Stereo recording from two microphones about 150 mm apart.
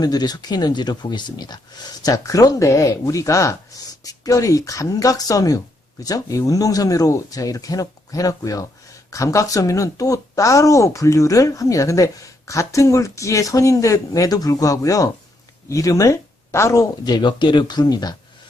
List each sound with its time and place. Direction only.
0.0 s speech: 25° left (ahead or behind)